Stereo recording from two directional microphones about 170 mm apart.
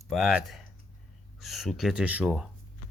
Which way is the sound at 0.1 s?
Centre (ahead or behind).